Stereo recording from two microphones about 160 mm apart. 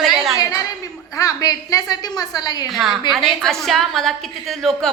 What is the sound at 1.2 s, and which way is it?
A woman's voice, 20° left (ahead or behind).